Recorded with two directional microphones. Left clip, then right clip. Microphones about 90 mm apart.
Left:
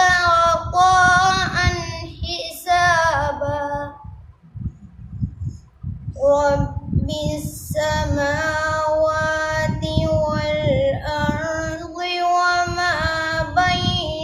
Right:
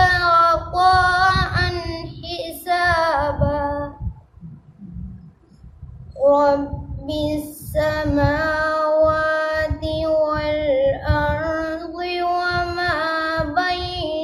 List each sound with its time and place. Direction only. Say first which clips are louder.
0.0 s child singing: even; 20° left (ahead or behind)
6.2 s a sound: right 1 dB; 20° left (ahead or behind)
7.0 s child singing: right 3 dB; 20° left (ahead or behind)